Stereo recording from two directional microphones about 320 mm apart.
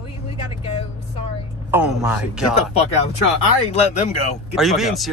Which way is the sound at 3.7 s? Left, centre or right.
Left.